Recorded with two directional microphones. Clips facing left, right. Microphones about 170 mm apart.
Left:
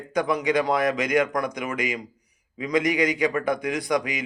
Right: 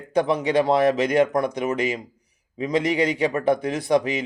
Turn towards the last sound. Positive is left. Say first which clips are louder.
# right 4 dB
turn(degrees=-30)  # may be behind; listen again after turning